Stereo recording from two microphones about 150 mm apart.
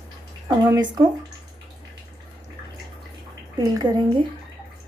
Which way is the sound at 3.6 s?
25° right (ahead or behind).